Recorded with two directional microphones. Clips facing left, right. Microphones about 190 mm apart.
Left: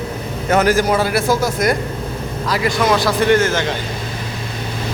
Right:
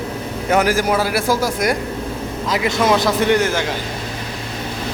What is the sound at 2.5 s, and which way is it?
A man's voice, 20° right (ahead or behind).